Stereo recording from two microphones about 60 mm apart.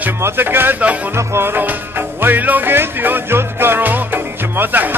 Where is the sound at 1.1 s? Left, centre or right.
Right.